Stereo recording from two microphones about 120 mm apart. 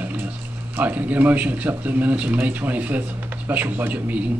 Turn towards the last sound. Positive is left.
turn(degrees=-10)  # may be behind; listen again after turning